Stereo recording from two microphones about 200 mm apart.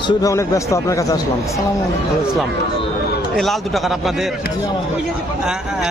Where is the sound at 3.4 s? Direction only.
Centre (ahead or behind).